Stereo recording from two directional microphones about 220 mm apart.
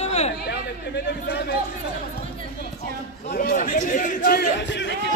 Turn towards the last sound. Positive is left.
turn(degrees=55)  # may be behind; listen again after turning